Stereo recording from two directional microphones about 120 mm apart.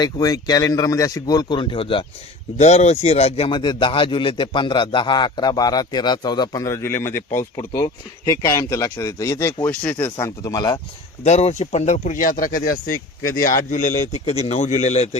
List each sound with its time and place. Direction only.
0.0 s a man's voice: 30° left (ahead or behind)
2.6 s a man's voice: 70° left (ahead or behind); by 7.4 s 20° left (ahead or behind)
7.5 s speech: 30° left (ahead or behind)
9.8 s speech: 10° left (ahead or behind)
10.2 s speech: 25° left (ahead or behind)
11.2 s a man's voice: 65° left (ahead or behind)
13.5 s a man's voice: 90° left; by 15.2 s 65° left (ahead or behind)